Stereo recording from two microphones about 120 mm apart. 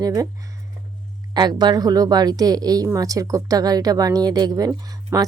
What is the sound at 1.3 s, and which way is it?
A woman's voice, 35° right (ahead or behind).